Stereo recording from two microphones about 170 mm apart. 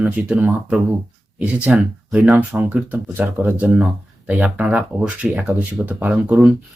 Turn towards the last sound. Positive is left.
turn(degrees=-5)  # may be behind; listen again after turning